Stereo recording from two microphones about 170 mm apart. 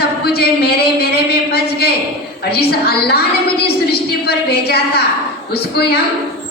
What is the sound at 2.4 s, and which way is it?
A woman's voice, 65° left (ahead or behind).